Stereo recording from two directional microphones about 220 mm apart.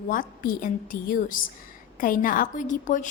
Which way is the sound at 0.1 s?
40° left (ahead or behind).